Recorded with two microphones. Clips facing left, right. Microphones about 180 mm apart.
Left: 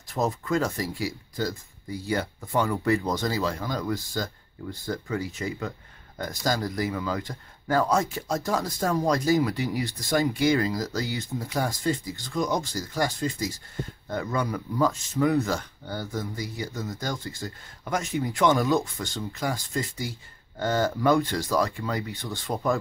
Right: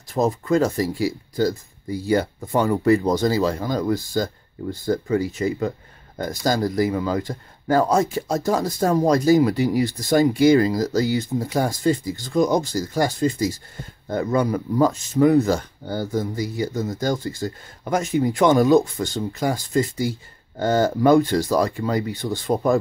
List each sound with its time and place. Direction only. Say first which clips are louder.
0.1 s speech: right 6 dB; 35° right (ahead or behind)
2.0 s speech: right 8 dB; 35° right (ahead or behind)